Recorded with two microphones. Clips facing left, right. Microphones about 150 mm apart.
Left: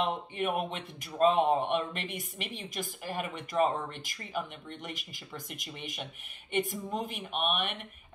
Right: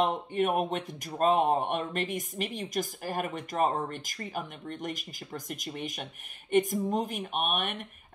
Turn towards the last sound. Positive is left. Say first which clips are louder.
# right 1 dB
turn(degrees=-45)  # may be behind; listen again after turning